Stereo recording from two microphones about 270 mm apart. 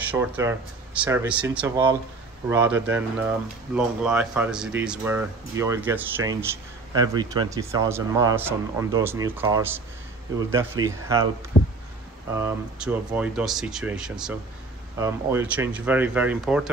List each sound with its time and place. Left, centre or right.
0.0 s speech: centre
11.5 s a sound: left
12.4 s speech: centre